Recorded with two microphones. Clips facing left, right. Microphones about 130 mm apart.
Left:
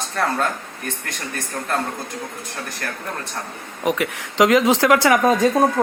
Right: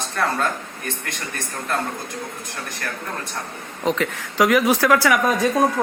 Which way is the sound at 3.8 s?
10° left (ahead or behind).